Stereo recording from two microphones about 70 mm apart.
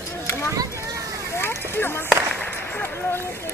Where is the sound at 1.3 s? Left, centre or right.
Left.